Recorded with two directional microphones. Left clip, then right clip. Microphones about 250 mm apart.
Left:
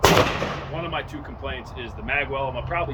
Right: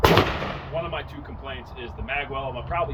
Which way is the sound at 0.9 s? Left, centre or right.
Centre.